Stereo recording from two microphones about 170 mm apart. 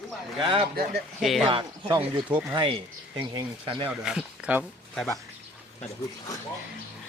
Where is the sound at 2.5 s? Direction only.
30° right (ahead or behind).